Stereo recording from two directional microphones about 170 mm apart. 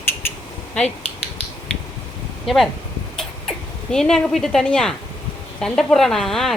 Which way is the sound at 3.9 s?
5° left (ahead or behind).